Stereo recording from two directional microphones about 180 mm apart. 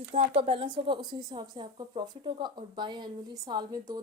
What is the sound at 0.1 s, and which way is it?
Speech, 30° right (ahead or behind).